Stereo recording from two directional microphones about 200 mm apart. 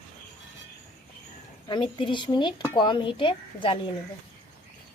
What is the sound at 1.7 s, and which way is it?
Speech, 25° left (ahead or behind).